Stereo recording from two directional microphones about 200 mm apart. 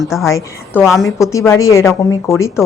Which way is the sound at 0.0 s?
Centre (ahead or behind).